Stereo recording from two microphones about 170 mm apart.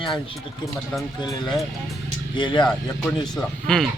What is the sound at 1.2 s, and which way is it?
Speech, 25° left (ahead or behind).